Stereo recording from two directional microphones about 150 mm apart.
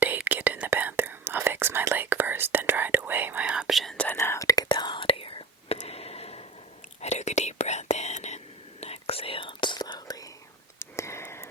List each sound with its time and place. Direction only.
0.0 s whispering: 10° right (ahead or behind); by 4.2 s 10° left (ahead or behind)
4.2 s whispering: 20° left (ahead or behind)
10.8 s a sound: 20° left (ahead or behind)